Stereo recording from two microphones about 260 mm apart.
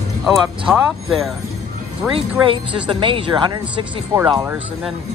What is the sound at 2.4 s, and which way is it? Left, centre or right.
Speech, centre.